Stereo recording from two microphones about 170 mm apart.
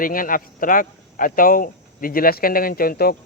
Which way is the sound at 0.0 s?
55° left (ahead or behind).